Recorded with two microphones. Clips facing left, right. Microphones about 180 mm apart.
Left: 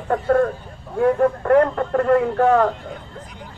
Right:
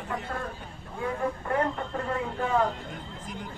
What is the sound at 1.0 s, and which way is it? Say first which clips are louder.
Speech: left 13 dB; 70° left (ahead or behind).